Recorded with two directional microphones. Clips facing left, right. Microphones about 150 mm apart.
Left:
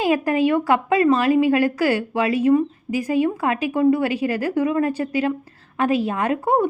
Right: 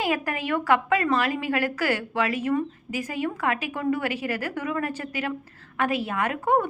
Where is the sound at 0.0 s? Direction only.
15° left (ahead or behind).